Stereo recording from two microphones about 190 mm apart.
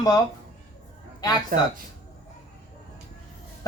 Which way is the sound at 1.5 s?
50° right (ahead or behind).